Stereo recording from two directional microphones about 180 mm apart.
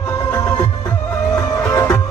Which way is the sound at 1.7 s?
20° left (ahead or behind).